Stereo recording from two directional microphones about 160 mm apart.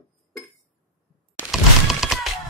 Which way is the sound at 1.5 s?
Centre (ahead or behind).